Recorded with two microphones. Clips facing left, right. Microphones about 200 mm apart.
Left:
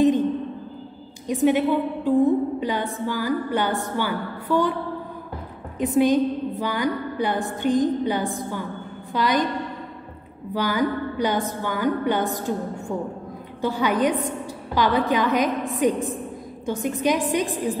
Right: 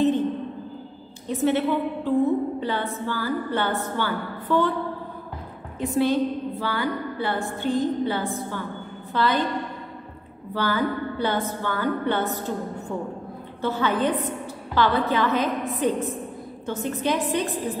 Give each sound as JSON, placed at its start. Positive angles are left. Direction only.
{"t": 1.2, "sound": "a woman's voice", "side_deg": 15}
{"t": 5.8, "sound": "a woman's voice", "side_deg": 15}
{"t": 10.5, "sound": "a woman's voice", "side_deg": 15}
{"t": 13.6, "sound": "a woman's voice", "side_deg": 15}